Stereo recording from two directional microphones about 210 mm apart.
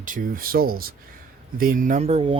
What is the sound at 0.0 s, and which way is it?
Speech, 40° right (ahead or behind).